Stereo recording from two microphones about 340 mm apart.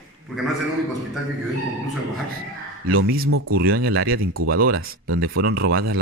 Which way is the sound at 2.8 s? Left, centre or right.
Right.